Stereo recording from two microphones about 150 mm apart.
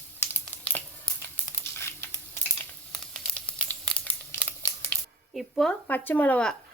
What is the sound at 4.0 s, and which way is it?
Crumpling, 10° left (ahead or behind).